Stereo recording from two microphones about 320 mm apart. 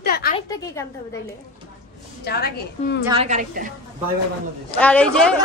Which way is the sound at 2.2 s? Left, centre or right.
Left.